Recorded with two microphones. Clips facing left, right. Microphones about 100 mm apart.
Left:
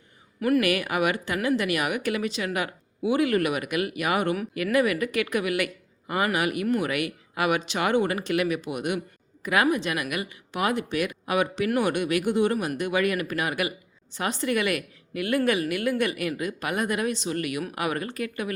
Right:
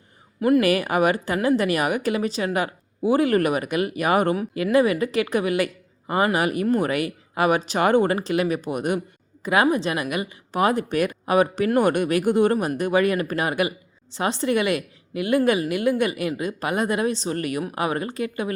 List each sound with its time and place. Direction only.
0.3 s a woman's voice: 25° right (ahead or behind)
9.4 s a woman's voice: 30° right (ahead or behind)